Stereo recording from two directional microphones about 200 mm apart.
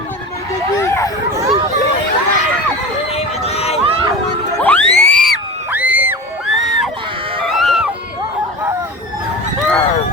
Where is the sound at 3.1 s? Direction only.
30° left (ahead or behind).